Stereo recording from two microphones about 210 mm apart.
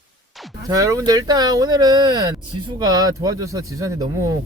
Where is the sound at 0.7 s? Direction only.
15° right (ahead or behind).